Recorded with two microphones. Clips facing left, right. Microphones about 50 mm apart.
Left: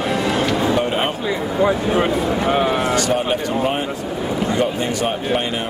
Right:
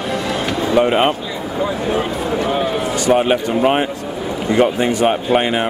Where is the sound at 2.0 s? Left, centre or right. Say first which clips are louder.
Left 1 dB; left.